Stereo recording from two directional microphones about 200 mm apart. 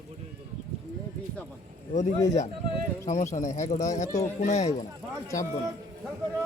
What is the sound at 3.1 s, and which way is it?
Speech, 35° left (ahead or behind).